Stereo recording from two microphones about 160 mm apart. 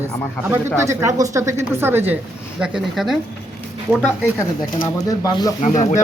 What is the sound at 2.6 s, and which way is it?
Speech, 5° right (ahead or behind).